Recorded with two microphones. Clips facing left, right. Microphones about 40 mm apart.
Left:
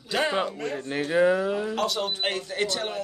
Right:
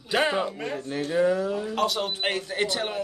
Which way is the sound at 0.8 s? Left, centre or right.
Left.